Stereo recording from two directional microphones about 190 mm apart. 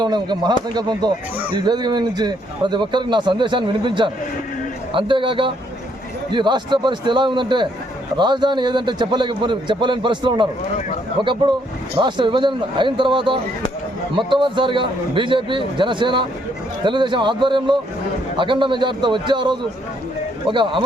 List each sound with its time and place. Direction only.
0.0 s a man's voice: 20° right (ahead or behind)